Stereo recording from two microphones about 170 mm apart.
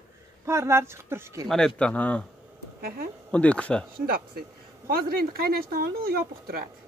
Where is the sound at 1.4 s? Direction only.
5° left (ahead or behind).